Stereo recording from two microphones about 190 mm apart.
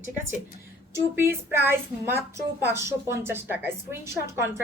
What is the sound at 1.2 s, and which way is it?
Speech, 10° right (ahead or behind).